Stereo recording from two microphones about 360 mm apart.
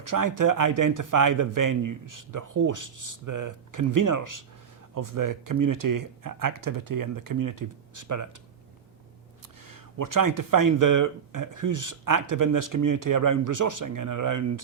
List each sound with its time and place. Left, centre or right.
0.0 s speech: right
9.6 s speech: right